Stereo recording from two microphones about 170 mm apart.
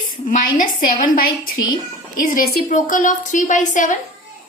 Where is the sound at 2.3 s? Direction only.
55° left (ahead or behind).